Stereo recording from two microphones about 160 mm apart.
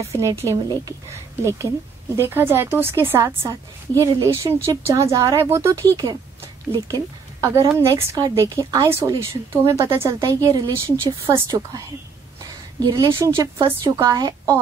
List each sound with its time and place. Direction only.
0.0 s a woman's voice: 20° right (ahead or behind)
12.8 s a woman's voice: 25° right (ahead or behind)